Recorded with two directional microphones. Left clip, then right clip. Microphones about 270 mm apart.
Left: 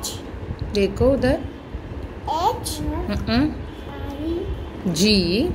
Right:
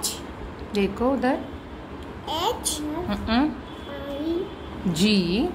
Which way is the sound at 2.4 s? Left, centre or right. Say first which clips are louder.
Left 3 dB; right.